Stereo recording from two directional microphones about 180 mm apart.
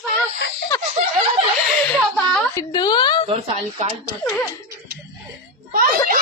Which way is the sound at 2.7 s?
25° left (ahead or behind).